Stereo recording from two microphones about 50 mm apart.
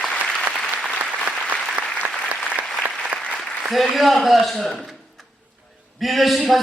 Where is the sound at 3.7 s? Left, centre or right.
Centre.